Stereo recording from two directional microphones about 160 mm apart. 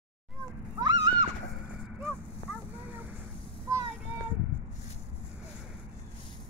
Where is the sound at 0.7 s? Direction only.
25° right (ahead or behind).